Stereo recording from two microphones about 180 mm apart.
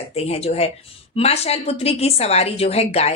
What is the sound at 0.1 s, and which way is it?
A woman's voice, 35° left (ahead or behind).